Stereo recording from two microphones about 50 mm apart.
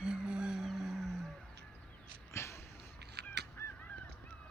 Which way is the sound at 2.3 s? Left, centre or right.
Left.